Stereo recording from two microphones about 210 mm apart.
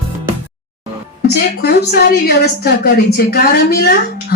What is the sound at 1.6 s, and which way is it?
A woman's voice, 45° left (ahead or behind).